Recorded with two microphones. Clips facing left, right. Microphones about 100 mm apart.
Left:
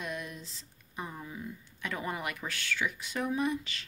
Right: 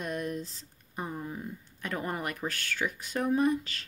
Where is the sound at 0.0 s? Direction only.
40° right (ahead or behind).